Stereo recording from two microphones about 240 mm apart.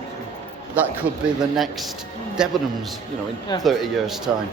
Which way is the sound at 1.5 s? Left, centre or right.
Centre.